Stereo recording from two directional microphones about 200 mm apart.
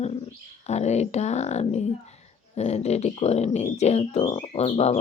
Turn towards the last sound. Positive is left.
turn(degrees=30)  # may be behind; listen again after turning